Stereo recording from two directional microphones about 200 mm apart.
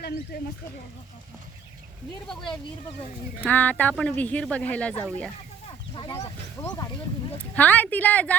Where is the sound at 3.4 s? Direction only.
5° left (ahead or behind).